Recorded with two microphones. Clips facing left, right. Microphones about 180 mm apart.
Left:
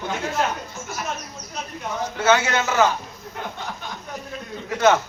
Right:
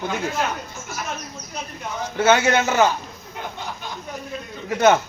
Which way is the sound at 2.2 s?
20° right (ahead or behind).